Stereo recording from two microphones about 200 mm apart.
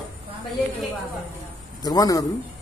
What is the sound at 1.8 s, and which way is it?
Speech, 20° left (ahead or behind).